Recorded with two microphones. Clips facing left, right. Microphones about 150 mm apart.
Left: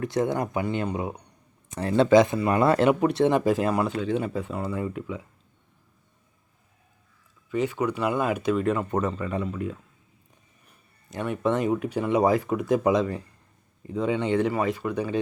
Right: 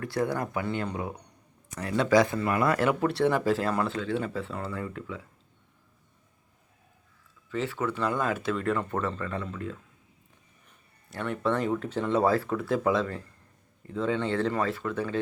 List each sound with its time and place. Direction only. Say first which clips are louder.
0.0 s speech: left 4 dB; 20° left (ahead or behind)
7.5 s speech: left 4 dB; 15° left (ahead or behind)
11.1 s speech: left 3 dB; 15° left (ahead or behind)